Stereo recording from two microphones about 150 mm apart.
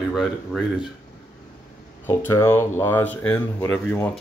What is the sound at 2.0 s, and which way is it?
Speech, 15° left (ahead or behind).